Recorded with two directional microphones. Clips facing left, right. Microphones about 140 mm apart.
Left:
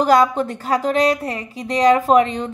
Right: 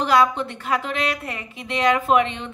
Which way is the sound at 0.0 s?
40° left (ahead or behind).